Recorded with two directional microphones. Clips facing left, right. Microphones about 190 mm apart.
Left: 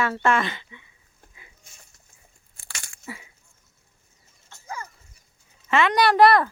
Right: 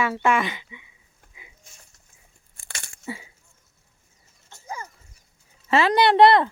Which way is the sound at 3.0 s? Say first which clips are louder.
Right 5 dB; 25° right (ahead or behind).